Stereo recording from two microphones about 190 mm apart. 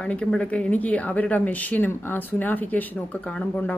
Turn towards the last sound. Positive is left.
turn(degrees=5)  # may be behind; listen again after turning